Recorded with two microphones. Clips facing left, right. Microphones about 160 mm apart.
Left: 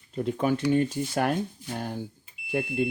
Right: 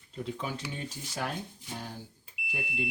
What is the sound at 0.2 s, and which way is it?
Speech, 55° left (ahead or behind).